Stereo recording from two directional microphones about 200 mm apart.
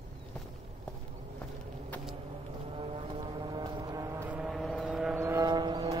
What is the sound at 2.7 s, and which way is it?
Music, 25° right (ahead or behind).